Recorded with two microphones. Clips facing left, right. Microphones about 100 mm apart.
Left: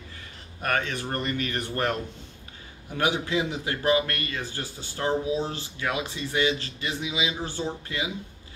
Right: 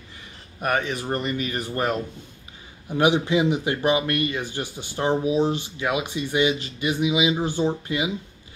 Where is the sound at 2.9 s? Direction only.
15° right (ahead or behind).